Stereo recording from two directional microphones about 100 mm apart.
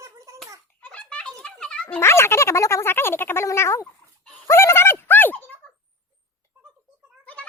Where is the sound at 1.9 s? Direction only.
25° left (ahead or behind).